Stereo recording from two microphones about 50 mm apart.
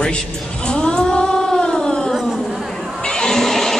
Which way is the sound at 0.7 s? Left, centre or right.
Centre.